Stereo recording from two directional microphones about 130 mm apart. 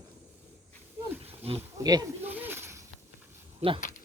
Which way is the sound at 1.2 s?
50° right (ahead or behind).